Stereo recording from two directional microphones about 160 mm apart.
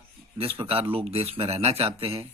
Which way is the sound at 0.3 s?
35° right (ahead or behind).